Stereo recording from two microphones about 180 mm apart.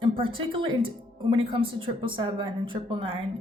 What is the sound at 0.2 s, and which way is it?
A woman's voice, 30° right (ahead or behind).